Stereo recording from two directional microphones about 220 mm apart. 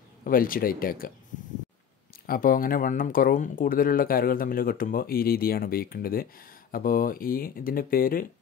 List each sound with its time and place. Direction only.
0.2 s speech: 40° left (ahead or behind)
2.2 s speech: 40° left (ahead or behind)